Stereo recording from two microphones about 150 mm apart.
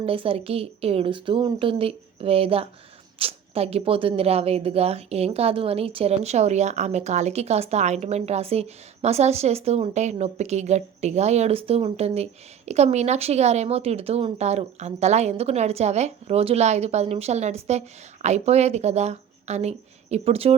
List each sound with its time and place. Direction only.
0.0 s speech: 40° right (ahead or behind)